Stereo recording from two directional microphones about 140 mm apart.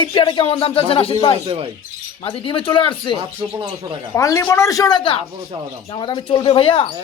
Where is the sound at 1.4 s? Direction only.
40° right (ahead or behind).